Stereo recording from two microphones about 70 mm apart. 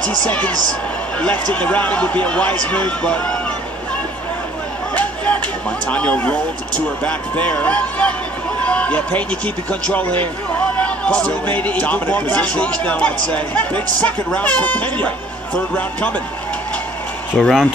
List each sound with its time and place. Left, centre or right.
0.0 s speech: centre
4.9 s a sound: left
5.9 s speech: centre
17.3 s speech: centre